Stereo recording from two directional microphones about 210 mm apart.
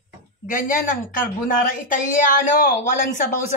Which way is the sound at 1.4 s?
40° left (ahead or behind).